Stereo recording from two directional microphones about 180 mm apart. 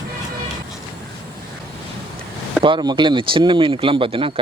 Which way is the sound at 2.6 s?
25° right (ahead or behind).